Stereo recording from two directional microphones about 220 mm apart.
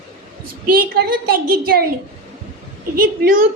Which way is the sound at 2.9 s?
40° right (ahead or behind).